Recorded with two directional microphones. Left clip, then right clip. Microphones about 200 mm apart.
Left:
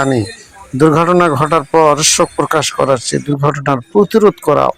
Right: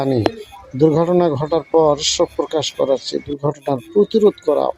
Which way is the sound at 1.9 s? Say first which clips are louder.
Left 6 dB; 20° left (ahead or behind).